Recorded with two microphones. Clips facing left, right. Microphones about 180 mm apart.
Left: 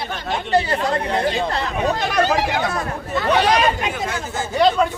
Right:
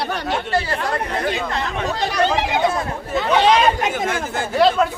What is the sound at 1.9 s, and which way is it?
Speech, 50° left (ahead or behind).